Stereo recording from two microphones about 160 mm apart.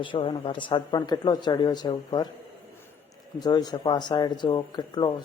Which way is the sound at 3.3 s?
25° left (ahead or behind).